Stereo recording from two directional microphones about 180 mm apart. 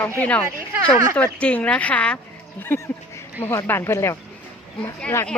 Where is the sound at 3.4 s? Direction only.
10° left (ahead or behind).